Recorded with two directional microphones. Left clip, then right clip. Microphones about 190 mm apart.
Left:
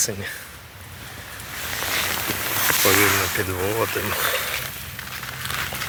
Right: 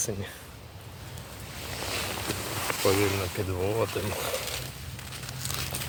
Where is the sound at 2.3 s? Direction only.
20° left (ahead or behind).